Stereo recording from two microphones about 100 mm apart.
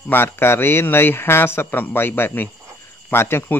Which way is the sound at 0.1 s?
25° left (ahead or behind).